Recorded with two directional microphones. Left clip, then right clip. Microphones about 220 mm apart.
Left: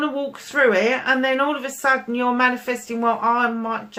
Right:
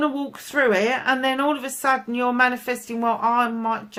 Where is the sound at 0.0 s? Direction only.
45° right (ahead or behind).